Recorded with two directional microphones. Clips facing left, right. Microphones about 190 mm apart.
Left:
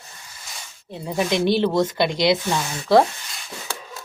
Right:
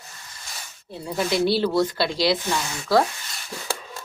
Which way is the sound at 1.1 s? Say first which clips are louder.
Left 2 dB; 20° left (ahead or behind).